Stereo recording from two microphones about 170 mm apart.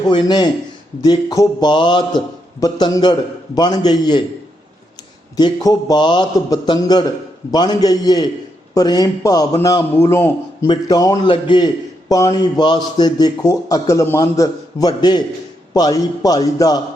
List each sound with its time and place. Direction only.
0.1 s a man's voice: 25° left (ahead or behind)
5.4 s a man's voice: 25° left (ahead or behind)